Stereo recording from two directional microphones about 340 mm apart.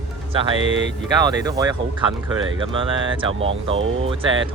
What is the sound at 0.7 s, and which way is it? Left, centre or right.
Speech, right.